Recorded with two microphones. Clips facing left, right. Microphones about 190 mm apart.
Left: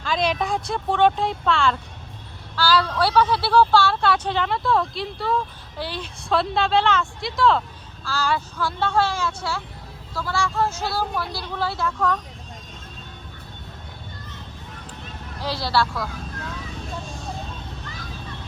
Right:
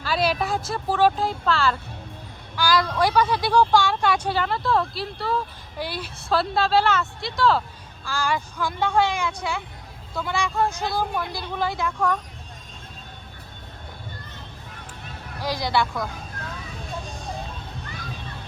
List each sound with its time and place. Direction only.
0.0 s speech: 5° right (ahead or behind)
2.6 s a woman's voice: 10° right (ahead or behind)
8.0 s a woman's voice: 15° right (ahead or behind)
15.4 s a woman's voice: 15° right (ahead or behind)